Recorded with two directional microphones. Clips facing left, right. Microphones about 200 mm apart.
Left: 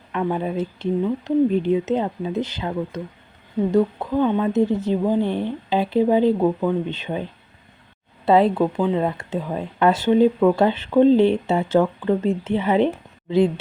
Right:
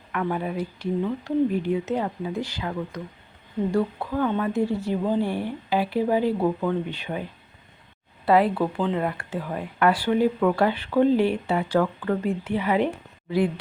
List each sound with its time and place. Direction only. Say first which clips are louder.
0.1 s speech: left 4 dB; 25° left (ahead or behind)